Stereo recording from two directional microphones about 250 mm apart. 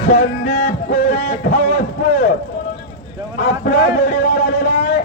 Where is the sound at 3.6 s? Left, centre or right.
Left.